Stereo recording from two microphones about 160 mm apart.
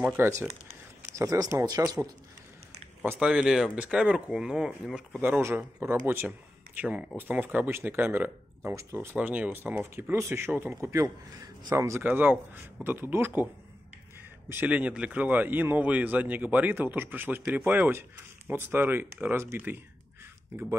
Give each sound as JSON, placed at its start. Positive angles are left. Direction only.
{"t": 0.2, "sound": "speech", "side_deg": -15}
{"t": 3.0, "sound": "speech", "side_deg": -5}
{"t": 14.5, "sound": "speech", "side_deg": -10}